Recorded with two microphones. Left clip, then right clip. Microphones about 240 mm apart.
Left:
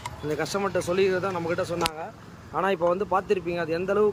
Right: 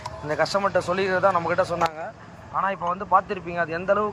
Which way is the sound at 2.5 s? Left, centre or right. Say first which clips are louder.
Left 1 dB; left.